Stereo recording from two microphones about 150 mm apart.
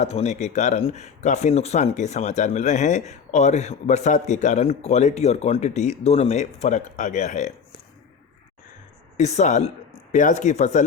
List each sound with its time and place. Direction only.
0.0 s speech: 45° left (ahead or behind)
9.1 s speech: 50° left (ahead or behind)